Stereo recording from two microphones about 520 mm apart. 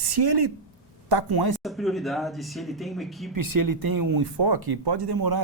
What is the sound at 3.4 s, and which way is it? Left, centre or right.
Speech, right.